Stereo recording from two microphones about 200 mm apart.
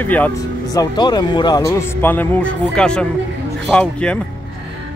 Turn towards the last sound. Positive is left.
turn(degrees=5)  # may be behind; listen again after turning